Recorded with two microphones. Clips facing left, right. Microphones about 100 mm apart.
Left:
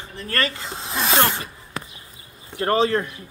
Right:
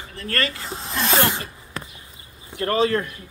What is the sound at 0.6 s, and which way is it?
Speech, centre (ahead or behind).